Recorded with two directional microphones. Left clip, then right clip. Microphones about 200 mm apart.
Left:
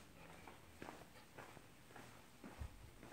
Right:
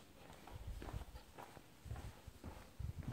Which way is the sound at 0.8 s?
20° right (ahead or behind).